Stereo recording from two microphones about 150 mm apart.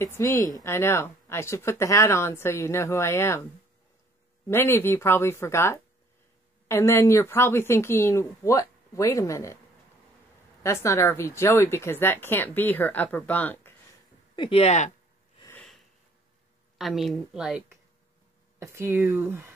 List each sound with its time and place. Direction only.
0.0 s speech: 20° left (ahead or behind)
4.5 s speech: 15° left (ahead or behind)
10.6 s speech: 20° left (ahead or behind)
14.3 s speech: 35° left (ahead or behind)
15.5 s sniff: 5° left (ahead or behind)
16.7 s a woman's voice: centre (ahead or behind)
18.6 s speech: 15° right (ahead or behind)
18.9 s a woman's voice: 5° right (ahead or behind)